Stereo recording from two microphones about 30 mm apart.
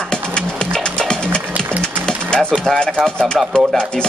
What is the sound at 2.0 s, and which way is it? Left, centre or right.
Typewriter, left.